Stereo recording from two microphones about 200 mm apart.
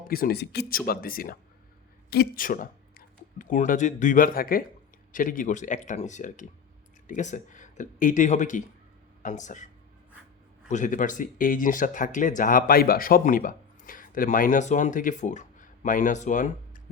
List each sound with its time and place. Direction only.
0.1 s speech: 50° left (ahead or behind)
10.7 s speech: 40° left (ahead or behind)